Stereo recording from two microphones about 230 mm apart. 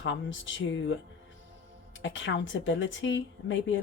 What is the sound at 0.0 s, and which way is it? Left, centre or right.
Speech, left.